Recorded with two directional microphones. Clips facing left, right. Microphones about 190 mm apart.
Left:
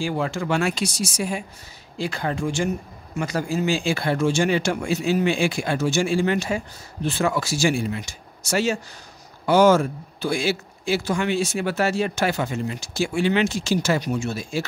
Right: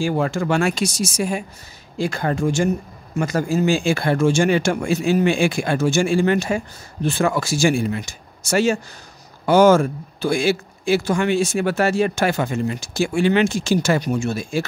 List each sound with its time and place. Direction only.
0.0 s a man's voice: 45° right (ahead or behind)